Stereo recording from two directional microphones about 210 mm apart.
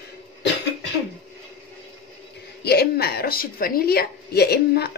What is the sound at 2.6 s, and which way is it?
Speech, 50° left (ahead or behind).